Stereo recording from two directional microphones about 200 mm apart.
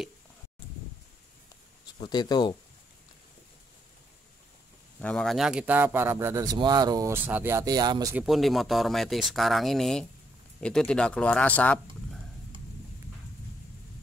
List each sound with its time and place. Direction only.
2.0 s speech: 20° left (ahead or behind)
5.0 s a man's voice: 5° left (ahead or behind); by 8.2 s 20° right (ahead or behind)
8.2 s speech: centre (ahead or behind)